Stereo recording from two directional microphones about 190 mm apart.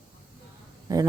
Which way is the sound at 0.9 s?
20° right (ahead or behind).